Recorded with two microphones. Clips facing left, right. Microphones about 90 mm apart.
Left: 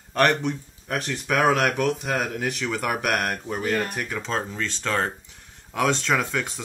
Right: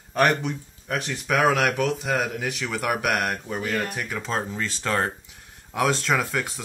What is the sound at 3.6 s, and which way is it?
Speech, 35° left (ahead or behind).